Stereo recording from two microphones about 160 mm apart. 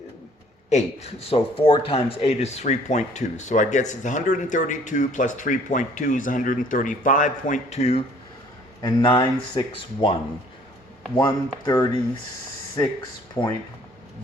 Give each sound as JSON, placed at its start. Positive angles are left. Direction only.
{"t": 0.7, "sound": "speech", "side_deg": 45}
{"t": 8.8, "sound": "speech", "side_deg": 25}
{"t": 11.2, "sound": "speech", "side_deg": 25}